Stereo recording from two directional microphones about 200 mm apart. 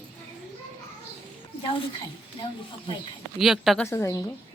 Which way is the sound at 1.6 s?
25° left (ahead or behind).